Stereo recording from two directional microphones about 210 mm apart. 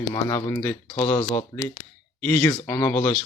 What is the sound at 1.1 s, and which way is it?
Speech, 25° left (ahead or behind).